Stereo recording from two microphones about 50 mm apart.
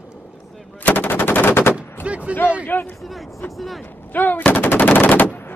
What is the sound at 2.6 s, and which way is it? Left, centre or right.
Speech, left.